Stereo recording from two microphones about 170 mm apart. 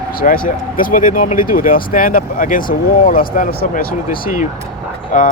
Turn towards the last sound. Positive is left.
turn(degrees=50)  # may be behind; listen again after turning